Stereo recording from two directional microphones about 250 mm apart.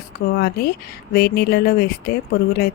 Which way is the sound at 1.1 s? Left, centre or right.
Left.